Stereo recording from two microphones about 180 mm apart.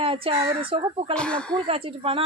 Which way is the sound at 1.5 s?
30° right (ahead or behind).